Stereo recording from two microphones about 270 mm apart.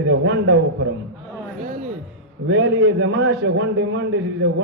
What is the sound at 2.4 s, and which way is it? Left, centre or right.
A man's voice, right.